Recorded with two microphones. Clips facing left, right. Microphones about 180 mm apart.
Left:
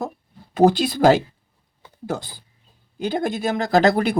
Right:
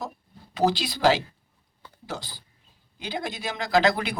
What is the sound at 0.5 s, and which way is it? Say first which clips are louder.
Speech: left 8 dB; 50° left (ahead or behind).